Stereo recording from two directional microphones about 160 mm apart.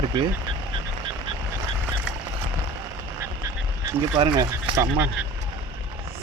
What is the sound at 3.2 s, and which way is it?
Frog, 20° right (ahead or behind).